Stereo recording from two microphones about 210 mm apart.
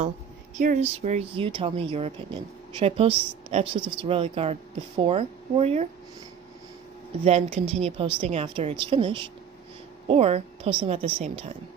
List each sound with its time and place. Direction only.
0.6 s speech: 35° right (ahead or behind)
7.2 s speech: 30° right (ahead or behind)